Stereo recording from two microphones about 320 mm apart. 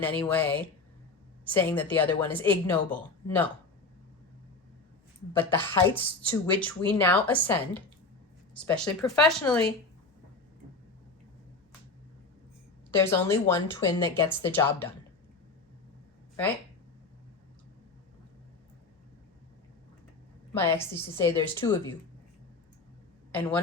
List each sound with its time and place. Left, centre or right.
0.0 s speech: centre
5.4 s speech: centre
13.0 s speech: centre
20.5 s speech: centre
23.3 s a woman's voice: centre